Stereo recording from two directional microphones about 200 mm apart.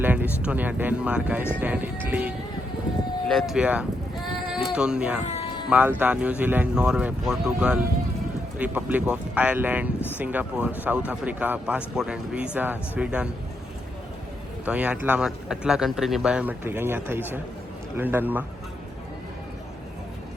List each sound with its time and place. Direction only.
0.0 s speech: 10° right (ahead or behind)
5.2 s a sound: 30° left (ahead or behind)
5.6 s speech: 10° right (ahead or behind)
14.6 s speech: 5° right (ahead or behind)